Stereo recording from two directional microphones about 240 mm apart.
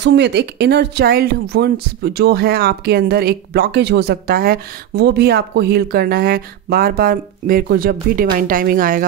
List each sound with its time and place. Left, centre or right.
0.0 s speech: right